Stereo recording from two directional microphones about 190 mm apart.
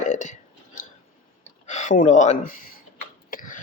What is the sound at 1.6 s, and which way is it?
Speech, 40° left (ahead or behind).